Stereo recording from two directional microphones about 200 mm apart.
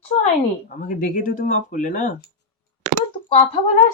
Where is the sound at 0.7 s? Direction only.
40° left (ahead or behind).